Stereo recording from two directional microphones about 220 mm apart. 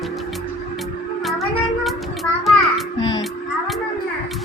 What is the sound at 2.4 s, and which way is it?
Child singing, centre (ahead or behind).